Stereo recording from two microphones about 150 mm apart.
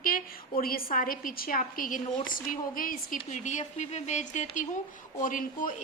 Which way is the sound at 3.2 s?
55° left (ahead or behind).